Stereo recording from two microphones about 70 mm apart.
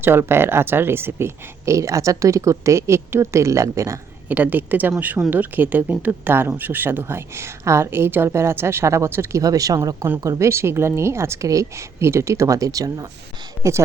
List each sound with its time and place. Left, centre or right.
0.0 s speech: right
4.3 s speech: right
9.4 s speech: right
13.6 s speech: right